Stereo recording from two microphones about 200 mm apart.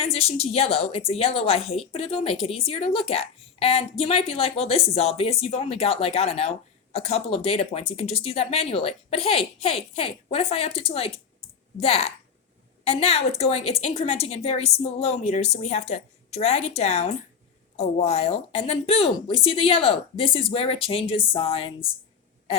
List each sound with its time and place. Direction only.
0.0 s a child's voice: 30° left (ahead or behind)